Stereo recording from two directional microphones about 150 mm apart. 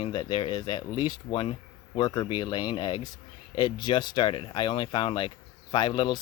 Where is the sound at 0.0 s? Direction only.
30° left (ahead or behind).